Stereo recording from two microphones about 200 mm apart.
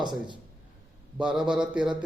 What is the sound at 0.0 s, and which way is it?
Speech, 20° right (ahead or behind).